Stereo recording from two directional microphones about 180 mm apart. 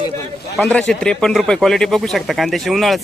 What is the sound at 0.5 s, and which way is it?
Speech, 5° left (ahead or behind).